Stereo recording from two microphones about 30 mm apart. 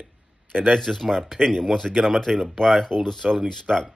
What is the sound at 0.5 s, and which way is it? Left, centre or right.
Speech, right.